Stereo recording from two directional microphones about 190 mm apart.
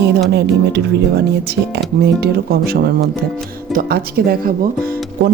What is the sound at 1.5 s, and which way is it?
Speech, 60° right (ahead or behind).